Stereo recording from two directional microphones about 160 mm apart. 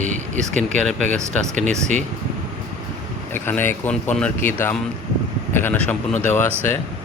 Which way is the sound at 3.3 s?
15° left (ahead or behind).